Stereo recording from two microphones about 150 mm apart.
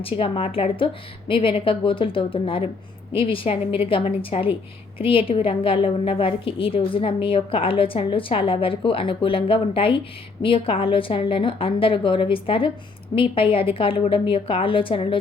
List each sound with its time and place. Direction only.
0.0 s a woman's voice: 40° left (ahead or behind)